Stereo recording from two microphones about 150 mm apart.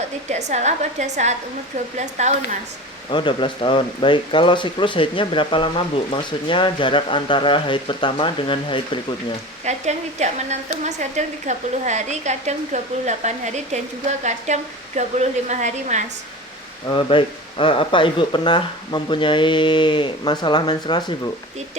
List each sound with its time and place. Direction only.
0.3 s a woman's voice: 50° right (ahead or behind)
3.1 s speech: 35° left (ahead or behind)
9.6 s a woman's voice: 50° right (ahead or behind)
16.9 s speech: 35° left (ahead or behind)